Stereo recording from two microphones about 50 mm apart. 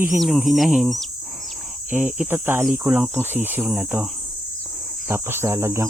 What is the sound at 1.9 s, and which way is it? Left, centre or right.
Speech, right.